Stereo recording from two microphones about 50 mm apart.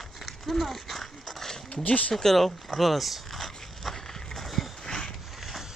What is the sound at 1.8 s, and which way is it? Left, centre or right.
Speech, left.